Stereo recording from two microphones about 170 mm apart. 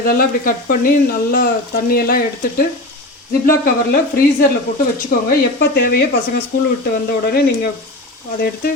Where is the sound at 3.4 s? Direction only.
55° left (ahead or behind).